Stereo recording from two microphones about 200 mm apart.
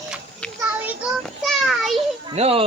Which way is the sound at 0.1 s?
5° left (ahead or behind).